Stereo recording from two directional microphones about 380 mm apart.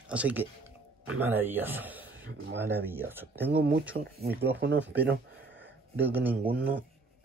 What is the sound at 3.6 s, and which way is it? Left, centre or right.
Speech, right.